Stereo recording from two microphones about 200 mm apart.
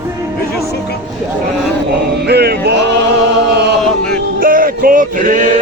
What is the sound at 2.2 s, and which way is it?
Music, 55° right (ahead or behind).